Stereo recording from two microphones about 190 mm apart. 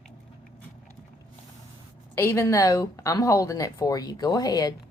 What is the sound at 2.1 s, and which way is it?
Speech, 15° left (ahead or behind).